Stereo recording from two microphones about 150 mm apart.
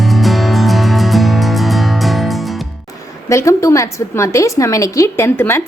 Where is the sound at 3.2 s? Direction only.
20° left (ahead or behind).